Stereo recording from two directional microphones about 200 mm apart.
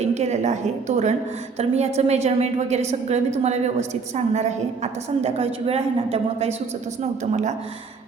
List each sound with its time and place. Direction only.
0.0 s a woman's voice: 35° right (ahead or behind)